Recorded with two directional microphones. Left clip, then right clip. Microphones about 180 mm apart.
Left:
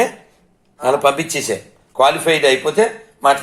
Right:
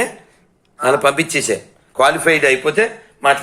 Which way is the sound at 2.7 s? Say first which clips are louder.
Even; 10° right (ahead or behind).